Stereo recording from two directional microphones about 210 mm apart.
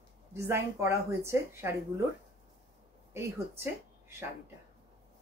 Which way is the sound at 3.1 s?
10° right (ahead or behind).